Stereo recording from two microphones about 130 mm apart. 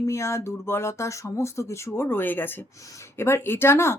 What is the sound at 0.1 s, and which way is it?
Speech, 20° left (ahead or behind).